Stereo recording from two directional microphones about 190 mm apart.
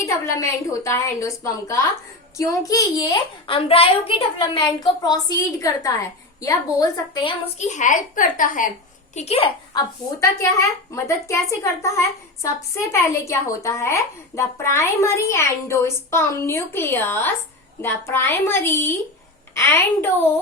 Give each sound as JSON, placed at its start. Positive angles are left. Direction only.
{"t": 0.0, "sound": "a woman's voice", "side_deg": 15}
{"t": 9.1, "sound": "a woman's voice", "side_deg": 35}
{"t": 10.9, "sound": "a woman's voice", "side_deg": 15}